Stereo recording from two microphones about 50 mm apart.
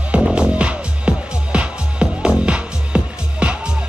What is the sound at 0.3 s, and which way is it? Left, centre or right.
Music, right.